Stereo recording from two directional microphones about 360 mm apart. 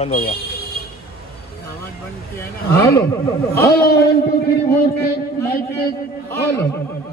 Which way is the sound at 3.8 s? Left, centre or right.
Left.